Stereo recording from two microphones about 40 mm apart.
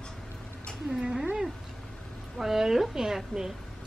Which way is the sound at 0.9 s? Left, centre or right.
Centre.